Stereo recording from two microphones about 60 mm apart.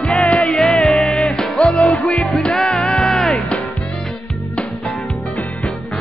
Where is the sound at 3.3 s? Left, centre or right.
Centre.